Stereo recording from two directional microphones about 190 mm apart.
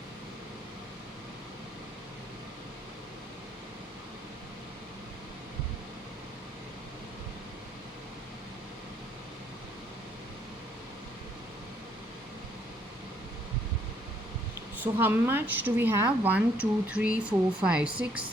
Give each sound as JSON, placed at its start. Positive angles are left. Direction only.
{"t": 14.9, "sound": "speech", "side_deg": -10}